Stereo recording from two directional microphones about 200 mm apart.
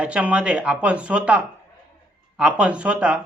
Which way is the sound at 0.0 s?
5° right (ahead or behind).